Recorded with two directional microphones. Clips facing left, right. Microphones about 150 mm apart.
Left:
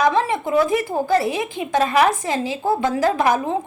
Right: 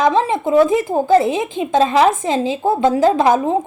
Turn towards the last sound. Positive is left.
turn(degrees=-25)  # may be behind; listen again after turning